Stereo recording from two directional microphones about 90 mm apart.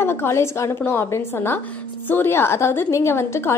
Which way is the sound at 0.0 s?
25° left (ahead or behind).